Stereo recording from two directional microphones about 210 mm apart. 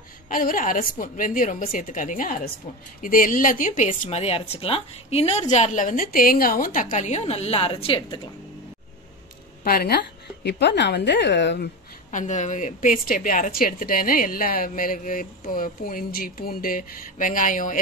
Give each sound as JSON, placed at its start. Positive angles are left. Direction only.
{"t": 0.3, "sound": "a woman's voice", "side_deg": 40}
{"t": 9.7, "sound": "a woman's voice", "side_deg": 45}
{"t": 12.1, "sound": "a woman's voice", "side_deg": 35}